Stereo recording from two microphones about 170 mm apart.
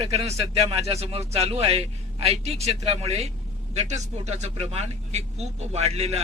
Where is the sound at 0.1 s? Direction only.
40° right (ahead or behind).